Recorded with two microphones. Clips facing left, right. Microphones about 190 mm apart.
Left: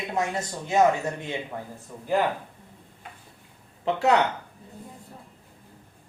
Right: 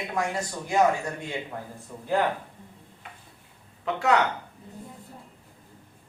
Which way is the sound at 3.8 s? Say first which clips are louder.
Left 2 dB; 30° left (ahead or behind).